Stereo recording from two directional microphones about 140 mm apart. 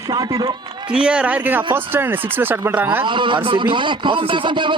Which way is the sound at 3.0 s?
35° right (ahead or behind).